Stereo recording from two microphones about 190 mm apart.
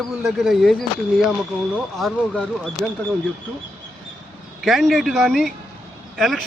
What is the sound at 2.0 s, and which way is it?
Speech, centre (ahead or behind).